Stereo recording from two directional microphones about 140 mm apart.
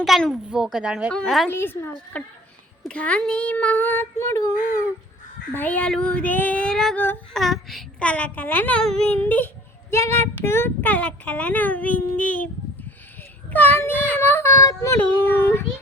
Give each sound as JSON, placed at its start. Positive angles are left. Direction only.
{"t": 0.0, "sound": "a woman's voice", "side_deg": 0}
{"t": 1.5, "sound": "speech", "side_deg": 15}
{"t": 5.5, "sound": "speech", "side_deg": 10}
{"t": 13.5, "sound": "speech", "side_deg": 15}